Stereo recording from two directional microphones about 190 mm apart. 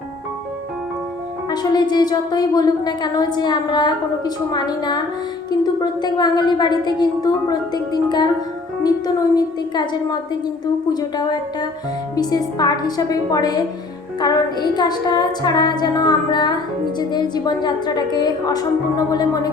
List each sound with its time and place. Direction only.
1.5 s a woman's voice: 20° left (ahead or behind)